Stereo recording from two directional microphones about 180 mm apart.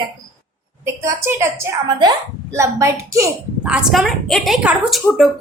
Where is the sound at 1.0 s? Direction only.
15° right (ahead or behind).